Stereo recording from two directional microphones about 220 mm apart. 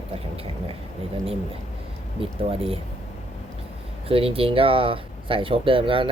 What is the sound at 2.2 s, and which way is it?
Speech, 25° right (ahead or behind).